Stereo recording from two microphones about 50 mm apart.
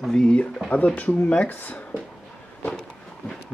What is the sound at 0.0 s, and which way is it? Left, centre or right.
Speech, centre.